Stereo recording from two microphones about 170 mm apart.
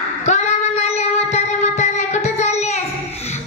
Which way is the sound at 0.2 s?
40° left (ahead or behind).